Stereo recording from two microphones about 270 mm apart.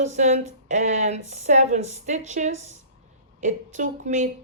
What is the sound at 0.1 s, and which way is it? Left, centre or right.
Speech, right.